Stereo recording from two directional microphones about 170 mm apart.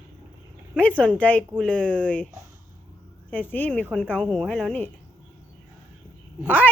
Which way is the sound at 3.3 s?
10° left (ahead or behind).